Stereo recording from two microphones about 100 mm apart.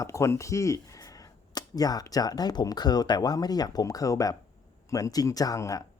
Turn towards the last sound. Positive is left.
turn(degrees=35)  # may be behind; listen again after turning